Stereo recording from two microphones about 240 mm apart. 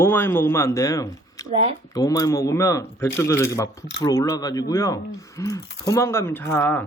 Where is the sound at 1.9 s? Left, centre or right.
Centre.